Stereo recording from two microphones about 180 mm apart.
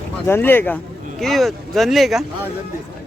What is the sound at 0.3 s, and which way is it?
Speech, 10° left (ahead or behind).